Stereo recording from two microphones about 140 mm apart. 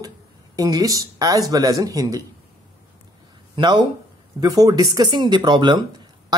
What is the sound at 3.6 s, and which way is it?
Speech, 35° right (ahead or behind).